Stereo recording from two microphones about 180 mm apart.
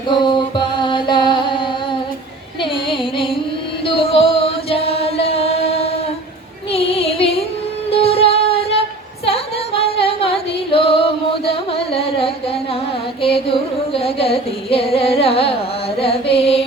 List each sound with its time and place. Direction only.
0.2 s music: 25° left (ahead or behind)
2.6 s carnatic music: 30° left (ahead or behind)
3.8 s chant: 30° left (ahead or behind)
6.7 s music: 35° left (ahead or behind)